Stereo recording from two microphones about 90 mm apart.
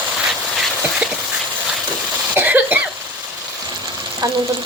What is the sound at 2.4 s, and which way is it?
Cough, 20° right (ahead or behind).